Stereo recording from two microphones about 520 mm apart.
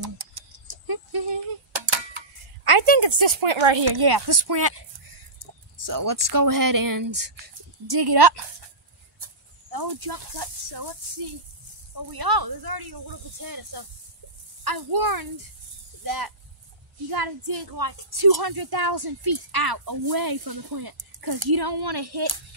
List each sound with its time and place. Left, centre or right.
0.0 s tick: right
3.8 s speech: right
12.1 s a woman's voice: right